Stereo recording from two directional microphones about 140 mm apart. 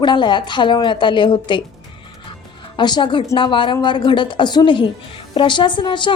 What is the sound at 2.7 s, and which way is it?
A woman's voice, 35° left (ahead or behind).